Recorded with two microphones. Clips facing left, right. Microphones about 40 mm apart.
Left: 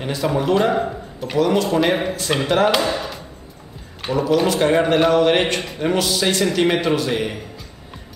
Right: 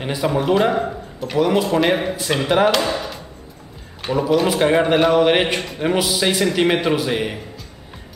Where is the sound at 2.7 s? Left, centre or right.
Centre.